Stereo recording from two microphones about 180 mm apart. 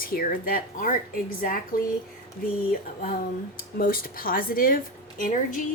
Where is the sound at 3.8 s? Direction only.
55° left (ahead or behind).